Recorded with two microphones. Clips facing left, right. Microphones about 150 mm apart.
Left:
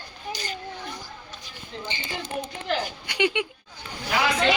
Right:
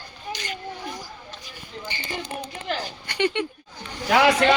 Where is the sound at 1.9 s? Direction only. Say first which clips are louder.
Even; 20° left (ahead or behind).